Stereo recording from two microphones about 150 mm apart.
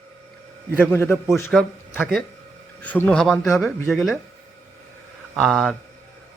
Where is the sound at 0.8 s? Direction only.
15° left (ahead or behind).